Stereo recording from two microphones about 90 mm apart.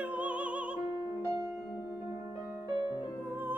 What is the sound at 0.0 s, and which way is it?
Music, 15° right (ahead or behind).